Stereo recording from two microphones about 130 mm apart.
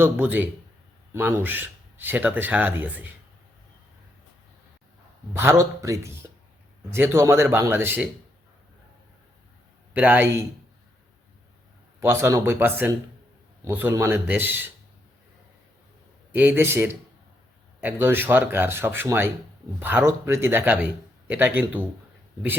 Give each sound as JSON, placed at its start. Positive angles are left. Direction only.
{"t": 0.0, "sound": "speech", "side_deg": -15}
{"t": 5.4, "sound": "speech", "side_deg": -20}
{"t": 9.9, "sound": "speech", "side_deg": -15}
{"t": 11.9, "sound": "speech", "side_deg": -20}
{"t": 16.3, "sound": "speech", "side_deg": -15}